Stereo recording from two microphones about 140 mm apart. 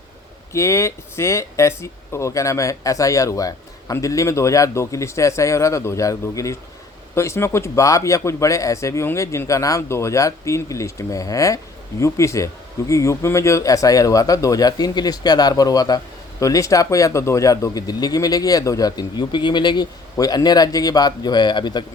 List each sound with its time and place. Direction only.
0.5 s speech: 20° left (ahead or behind)